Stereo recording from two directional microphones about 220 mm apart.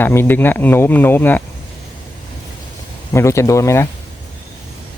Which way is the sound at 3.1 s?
10° left (ahead or behind).